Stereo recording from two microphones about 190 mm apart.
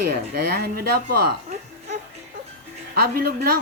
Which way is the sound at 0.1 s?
60° right (ahead or behind).